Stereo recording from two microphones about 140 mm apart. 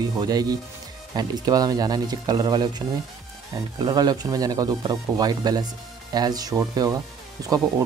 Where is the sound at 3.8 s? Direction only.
30° right (ahead or behind).